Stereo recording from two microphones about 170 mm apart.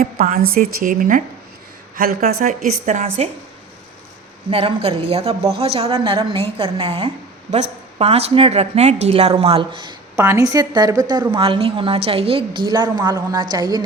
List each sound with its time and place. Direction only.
0.0 s a woman's voice: 55° right (ahead or behind)
2.2 s a woman's voice: 40° right (ahead or behind)
4.4 s a woman's voice: 35° right (ahead or behind)
10.2 s a woman's voice: 15° right (ahead or behind)